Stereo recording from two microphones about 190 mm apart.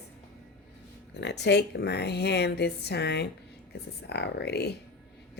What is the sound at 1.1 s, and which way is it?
Speech, 65° left (ahead or behind).